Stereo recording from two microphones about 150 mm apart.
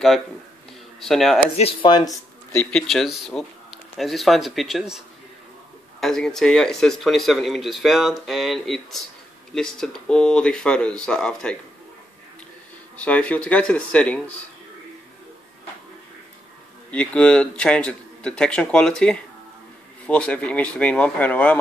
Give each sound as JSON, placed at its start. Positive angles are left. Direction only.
{"t": 1.0, "sound": "speech", "side_deg": 0}
{"t": 1.6, "sound": "speech", "side_deg": 35}
{"t": 2.6, "sound": "speech", "side_deg": 5}
{"t": 13.0, "sound": "speech", "side_deg": 10}
{"t": 16.9, "sound": "speech", "side_deg": 10}